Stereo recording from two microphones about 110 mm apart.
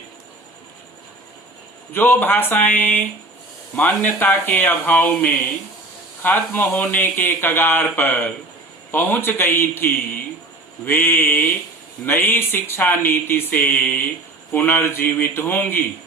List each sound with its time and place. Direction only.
1.9 s speech: 20° left (ahead or behind)